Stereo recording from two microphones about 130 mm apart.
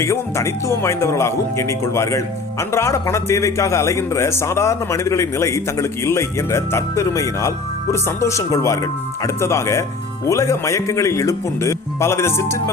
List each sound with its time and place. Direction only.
0.0 s speech: 20° left (ahead or behind)